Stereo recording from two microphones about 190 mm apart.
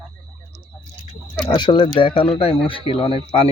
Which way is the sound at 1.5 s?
25° left (ahead or behind).